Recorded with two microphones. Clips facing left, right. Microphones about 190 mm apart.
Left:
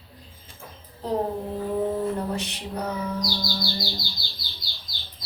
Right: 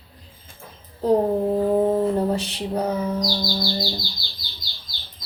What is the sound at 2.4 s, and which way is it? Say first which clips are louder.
Female singing: right 6 dB; 30° right (ahead or behind).